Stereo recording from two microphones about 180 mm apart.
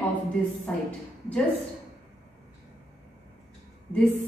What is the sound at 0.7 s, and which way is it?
Speech, 10° left (ahead or behind).